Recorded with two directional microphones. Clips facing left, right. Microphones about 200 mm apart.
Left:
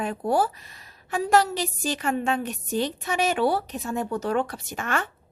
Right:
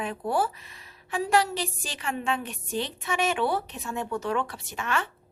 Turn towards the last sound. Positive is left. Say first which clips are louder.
# left 2 dB
turn(degrees=45)  # may be behind; listen again after turning